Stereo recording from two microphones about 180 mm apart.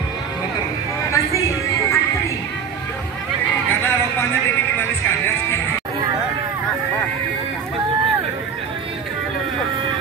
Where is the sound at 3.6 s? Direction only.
10° left (ahead or behind).